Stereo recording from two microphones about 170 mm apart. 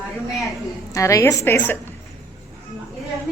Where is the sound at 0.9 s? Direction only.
20° left (ahead or behind).